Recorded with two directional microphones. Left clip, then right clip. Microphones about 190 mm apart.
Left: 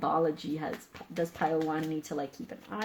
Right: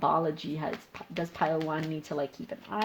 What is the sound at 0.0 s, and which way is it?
Speech, 30° right (ahead or behind).